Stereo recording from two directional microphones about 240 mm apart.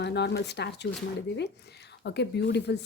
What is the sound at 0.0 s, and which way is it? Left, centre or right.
Speech, left.